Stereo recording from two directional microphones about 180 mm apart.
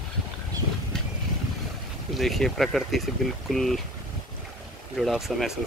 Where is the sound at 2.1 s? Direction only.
Centre (ahead or behind).